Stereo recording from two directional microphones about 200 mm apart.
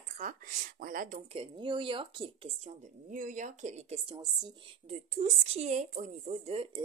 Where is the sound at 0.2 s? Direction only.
40° right (ahead or behind).